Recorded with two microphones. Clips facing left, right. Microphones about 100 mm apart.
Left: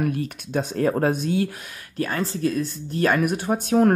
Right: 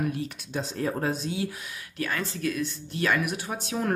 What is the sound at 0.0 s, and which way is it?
Speech, 55° left (ahead or behind).